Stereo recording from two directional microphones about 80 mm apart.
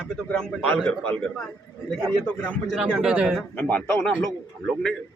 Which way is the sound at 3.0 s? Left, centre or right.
Centre.